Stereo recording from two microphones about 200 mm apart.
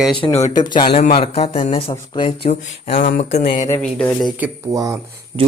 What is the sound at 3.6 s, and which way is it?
Speech, 15° left (ahead or behind).